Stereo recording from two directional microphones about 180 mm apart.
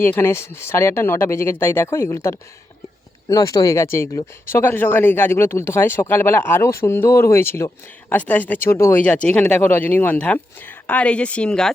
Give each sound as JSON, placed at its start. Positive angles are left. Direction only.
{"t": 0.0, "sound": "speech", "side_deg": 10}